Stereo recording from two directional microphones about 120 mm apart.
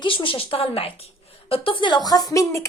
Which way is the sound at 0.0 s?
45° left (ahead or behind).